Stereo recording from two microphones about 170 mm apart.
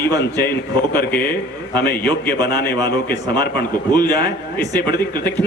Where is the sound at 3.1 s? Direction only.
20° right (ahead or behind).